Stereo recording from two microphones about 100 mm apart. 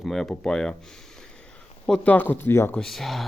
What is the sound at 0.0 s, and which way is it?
Speech, 5° left (ahead or behind).